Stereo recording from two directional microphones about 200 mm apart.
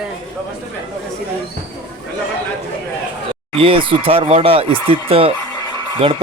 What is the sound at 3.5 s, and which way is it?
Speech, 30° right (ahead or behind).